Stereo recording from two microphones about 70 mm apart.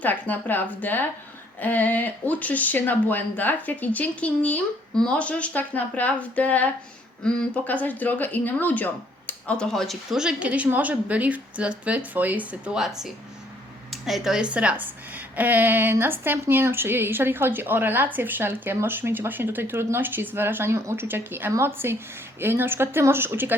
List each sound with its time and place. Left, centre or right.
0.0 s speech: left
9.6 s speech: centre
10.2 s a woman's voice: centre
12.7 s a woman's voice: centre; by 23.6 s right